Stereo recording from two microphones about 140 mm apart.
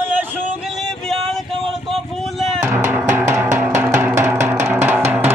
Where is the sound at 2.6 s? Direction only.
20° right (ahead or behind).